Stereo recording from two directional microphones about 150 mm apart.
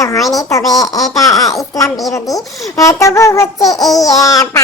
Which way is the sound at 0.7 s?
25° left (ahead or behind).